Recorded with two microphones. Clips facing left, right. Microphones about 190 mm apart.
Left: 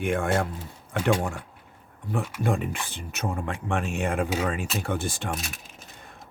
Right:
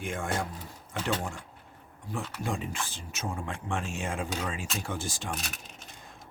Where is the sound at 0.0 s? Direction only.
60° left (ahead or behind).